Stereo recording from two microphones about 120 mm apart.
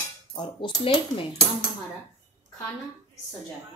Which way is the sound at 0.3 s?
40° left (ahead or behind).